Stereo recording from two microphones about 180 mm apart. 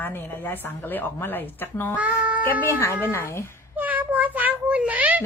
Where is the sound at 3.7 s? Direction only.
10° right (ahead or behind).